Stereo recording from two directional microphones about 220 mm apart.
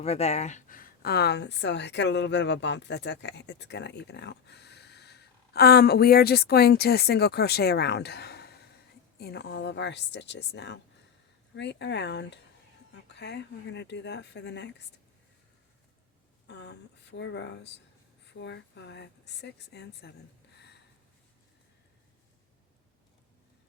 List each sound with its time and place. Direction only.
0.0 s a woman's voice: 30° left (ahead or behind); by 14.7 s 50° left (ahead or behind)
16.5 s speech: 50° left (ahead or behind)